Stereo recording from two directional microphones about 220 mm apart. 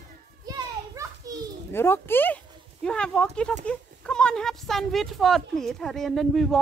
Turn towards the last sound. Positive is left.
turn(degrees=0)  # may be behind; listen again after turning